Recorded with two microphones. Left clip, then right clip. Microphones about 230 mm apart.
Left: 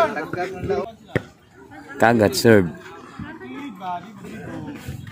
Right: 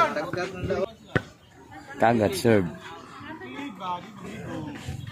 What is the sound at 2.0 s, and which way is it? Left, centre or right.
Speech, centre.